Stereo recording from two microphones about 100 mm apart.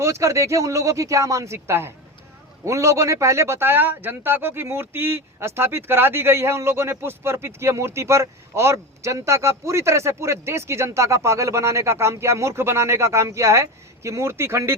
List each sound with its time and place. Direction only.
0.0 s speech: 30° right (ahead or behind)